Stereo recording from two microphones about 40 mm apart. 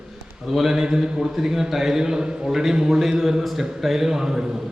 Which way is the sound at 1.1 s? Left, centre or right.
Centre.